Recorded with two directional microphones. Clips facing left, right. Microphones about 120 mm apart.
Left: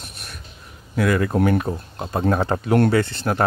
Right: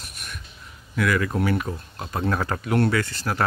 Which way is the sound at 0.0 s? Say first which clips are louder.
Left 1 dB; 30° left (ahead or behind).